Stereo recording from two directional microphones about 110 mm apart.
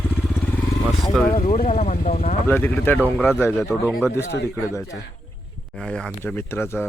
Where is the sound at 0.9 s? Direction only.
Centre (ahead or behind).